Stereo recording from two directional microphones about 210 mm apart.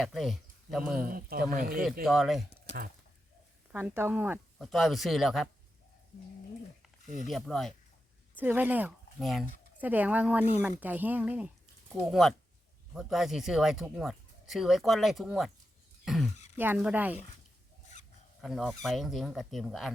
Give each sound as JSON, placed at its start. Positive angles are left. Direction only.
{"t": 0.0, "sound": "speech", "side_deg": 0}
{"t": 1.1, "sound": "speech", "side_deg": -45}
{"t": 2.0, "sound": "speech", "side_deg": 0}
{"t": 3.7, "sound": "speech", "side_deg": -10}
{"t": 6.8, "sound": "speech", "side_deg": 0}
{"t": 16.0, "sound": "a sound", "side_deg": 0}
{"t": 16.6, "sound": "speech", "side_deg": -10}
{"t": 18.4, "sound": "speech", "side_deg": 0}